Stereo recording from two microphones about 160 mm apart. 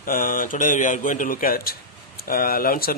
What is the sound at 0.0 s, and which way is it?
Speech, 60° left (ahead or behind).